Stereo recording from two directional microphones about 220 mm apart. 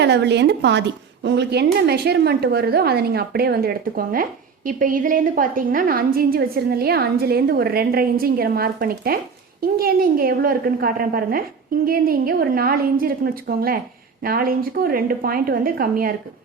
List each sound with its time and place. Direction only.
0.0 s a woman's voice: 50° right (ahead or behind)